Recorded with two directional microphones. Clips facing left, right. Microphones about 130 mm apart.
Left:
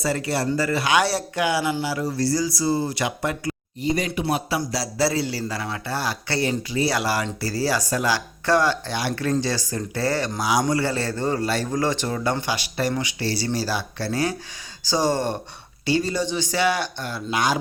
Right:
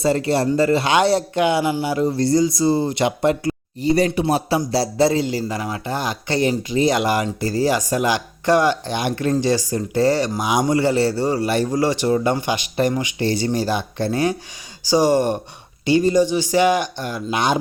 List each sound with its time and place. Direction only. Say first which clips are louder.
0.0 s speech: right 6 dB; 25° right (ahead or behind)